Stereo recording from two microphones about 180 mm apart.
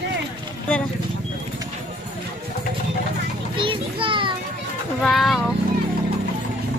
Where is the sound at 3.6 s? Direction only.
30° right (ahead or behind).